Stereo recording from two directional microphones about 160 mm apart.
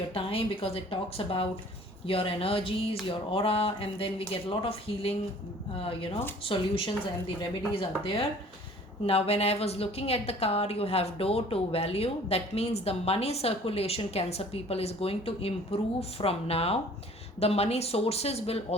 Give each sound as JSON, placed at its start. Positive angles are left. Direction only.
{"t": 0.1, "sound": "a woman's voice", "side_deg": 35}